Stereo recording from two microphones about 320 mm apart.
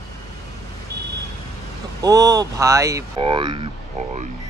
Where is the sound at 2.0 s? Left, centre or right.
Centre.